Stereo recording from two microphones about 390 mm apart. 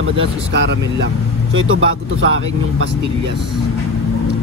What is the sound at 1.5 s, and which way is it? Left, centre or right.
Speech, right.